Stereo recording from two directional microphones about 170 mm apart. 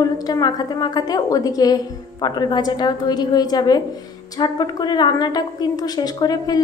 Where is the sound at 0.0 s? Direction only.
25° left (ahead or behind).